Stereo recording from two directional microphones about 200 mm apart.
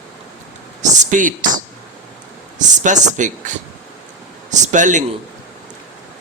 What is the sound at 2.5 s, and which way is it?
Speech, 40° right (ahead or behind).